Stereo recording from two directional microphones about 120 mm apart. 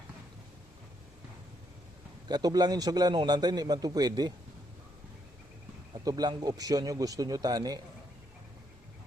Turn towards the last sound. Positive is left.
turn(degrees=-30)  # may be behind; listen again after turning